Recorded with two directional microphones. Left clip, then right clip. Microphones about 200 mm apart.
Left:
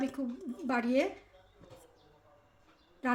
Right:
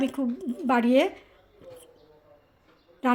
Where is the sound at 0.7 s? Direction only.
35° right (ahead or behind).